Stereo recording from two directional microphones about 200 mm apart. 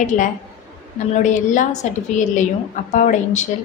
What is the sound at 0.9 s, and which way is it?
A woman's voice, 35° left (ahead or behind).